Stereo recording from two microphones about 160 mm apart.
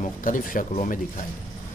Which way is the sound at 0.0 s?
55° left (ahead or behind).